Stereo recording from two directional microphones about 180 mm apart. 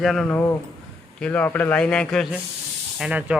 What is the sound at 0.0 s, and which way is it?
Speech, centre (ahead or behind).